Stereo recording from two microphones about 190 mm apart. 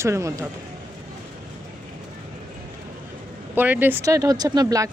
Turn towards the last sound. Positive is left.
turn(degrees=-20)  # may be behind; listen again after turning